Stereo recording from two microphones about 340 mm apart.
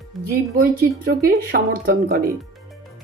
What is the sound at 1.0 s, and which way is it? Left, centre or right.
Speech, right.